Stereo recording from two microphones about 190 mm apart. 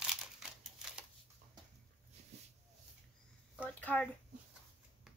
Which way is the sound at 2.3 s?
35° right (ahead or behind).